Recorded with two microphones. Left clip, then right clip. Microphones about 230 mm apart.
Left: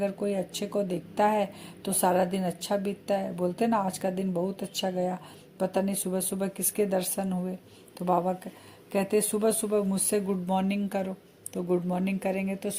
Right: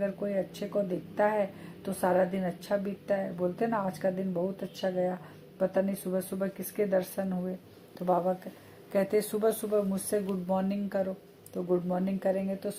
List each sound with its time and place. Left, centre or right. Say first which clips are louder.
0.0 s speech: left 2 dB; left